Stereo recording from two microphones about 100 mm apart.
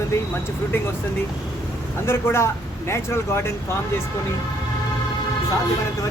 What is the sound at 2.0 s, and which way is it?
Speech, 25° left (ahead or behind).